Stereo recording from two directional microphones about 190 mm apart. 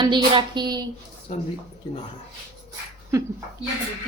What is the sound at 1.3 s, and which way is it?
Speech, 35° left (ahead or behind).